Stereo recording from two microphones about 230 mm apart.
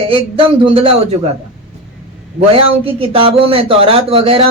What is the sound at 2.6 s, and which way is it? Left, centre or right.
Speech, right.